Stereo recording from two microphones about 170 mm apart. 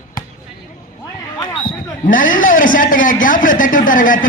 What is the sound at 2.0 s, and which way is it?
A man's voice, 50° left (ahead or behind).